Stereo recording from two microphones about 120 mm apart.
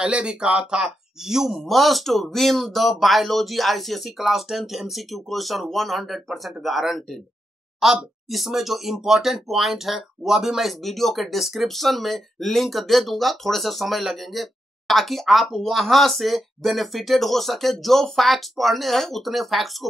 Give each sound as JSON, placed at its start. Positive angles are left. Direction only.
{"t": 0.0, "sound": "speech", "side_deg": -10}